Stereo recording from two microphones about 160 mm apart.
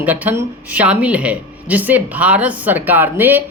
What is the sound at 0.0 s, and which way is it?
Speech, 10° right (ahead or behind).